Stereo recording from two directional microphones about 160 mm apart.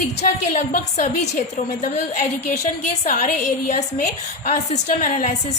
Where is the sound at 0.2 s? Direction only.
55° left (ahead or behind).